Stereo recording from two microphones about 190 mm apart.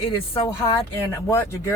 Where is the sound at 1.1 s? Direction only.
15° left (ahead or behind).